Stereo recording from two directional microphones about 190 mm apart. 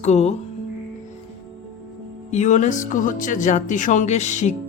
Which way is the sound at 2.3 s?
40° left (ahead or behind).